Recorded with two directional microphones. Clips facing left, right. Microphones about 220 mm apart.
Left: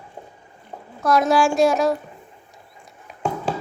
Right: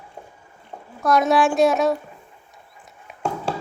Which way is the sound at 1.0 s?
Centre (ahead or behind).